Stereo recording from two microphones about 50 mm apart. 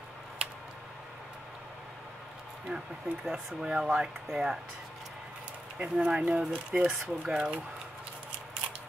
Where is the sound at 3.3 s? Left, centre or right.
Centre.